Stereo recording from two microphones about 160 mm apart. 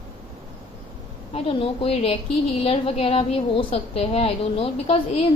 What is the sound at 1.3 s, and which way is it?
A woman's voice, 35° left (ahead or behind).